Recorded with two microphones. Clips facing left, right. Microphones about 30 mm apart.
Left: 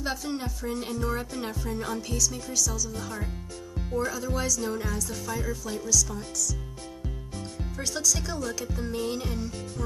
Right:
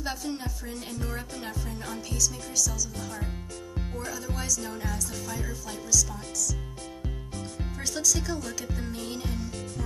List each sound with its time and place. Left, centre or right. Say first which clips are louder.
0.0 s music: left 2 dB; centre
4.4 s music: left 4 dB; centre
5.4 s music: left 4 dB; centre
7.9 s music: right 1 dB; centre